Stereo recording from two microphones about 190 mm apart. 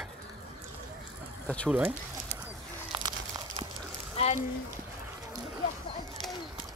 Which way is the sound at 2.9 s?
25° right (ahead or behind).